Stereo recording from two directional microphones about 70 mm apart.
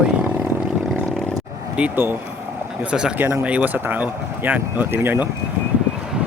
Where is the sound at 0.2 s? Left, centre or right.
Right.